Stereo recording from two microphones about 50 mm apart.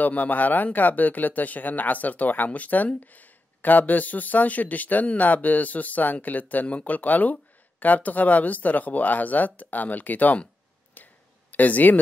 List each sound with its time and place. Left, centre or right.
0.0 s speech: left
11.0 s clicking: left
11.5 s speech: left